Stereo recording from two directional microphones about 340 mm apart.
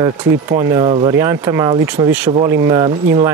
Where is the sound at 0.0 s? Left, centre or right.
Centre.